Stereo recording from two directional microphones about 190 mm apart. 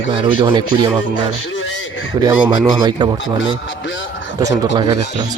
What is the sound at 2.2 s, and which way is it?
Speech, 20° right (ahead or behind).